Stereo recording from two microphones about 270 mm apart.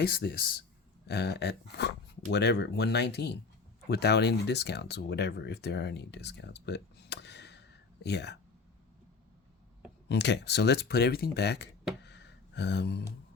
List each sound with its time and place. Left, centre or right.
0.0 s speech: left
10.1 s speech: left
12.0 s a sound: left